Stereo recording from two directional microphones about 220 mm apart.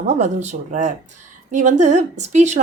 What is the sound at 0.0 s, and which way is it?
A woman's voice, 30° right (ahead or behind).